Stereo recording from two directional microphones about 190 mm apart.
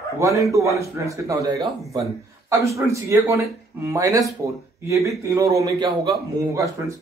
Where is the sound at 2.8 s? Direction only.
15° right (ahead or behind).